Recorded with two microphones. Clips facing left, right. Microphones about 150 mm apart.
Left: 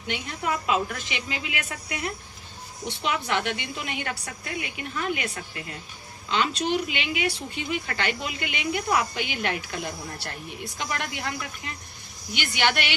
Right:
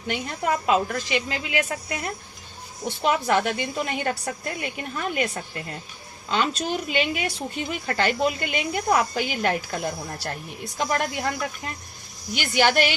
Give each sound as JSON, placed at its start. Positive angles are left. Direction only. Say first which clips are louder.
{"t": 0.1, "sound": "a woman's voice", "louder": "right 3 dB", "side_deg": -45}